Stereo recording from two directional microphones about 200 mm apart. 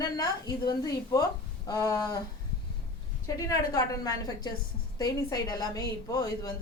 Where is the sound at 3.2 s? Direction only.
15° left (ahead or behind).